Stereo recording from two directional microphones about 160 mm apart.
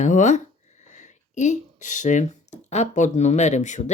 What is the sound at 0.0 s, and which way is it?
Speech, 50° left (ahead or behind).